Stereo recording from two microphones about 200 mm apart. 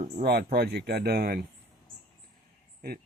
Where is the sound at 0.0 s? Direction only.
50° right (ahead or behind).